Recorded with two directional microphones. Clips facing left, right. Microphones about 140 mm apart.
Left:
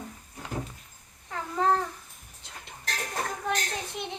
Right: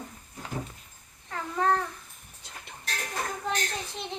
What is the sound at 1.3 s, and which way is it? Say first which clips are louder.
Babbling: left 1 dB; 10° left (ahead or behind).